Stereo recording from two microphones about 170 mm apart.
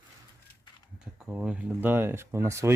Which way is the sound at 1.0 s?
5° right (ahead or behind).